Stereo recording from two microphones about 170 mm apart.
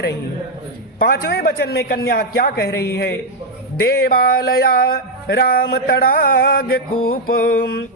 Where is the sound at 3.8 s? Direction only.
70° left (ahead or behind).